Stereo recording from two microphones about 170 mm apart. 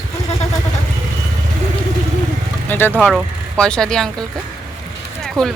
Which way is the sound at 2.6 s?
10° left (ahead or behind).